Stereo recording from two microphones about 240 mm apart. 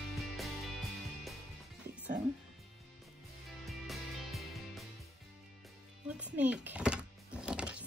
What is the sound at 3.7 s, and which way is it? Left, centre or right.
Music, centre.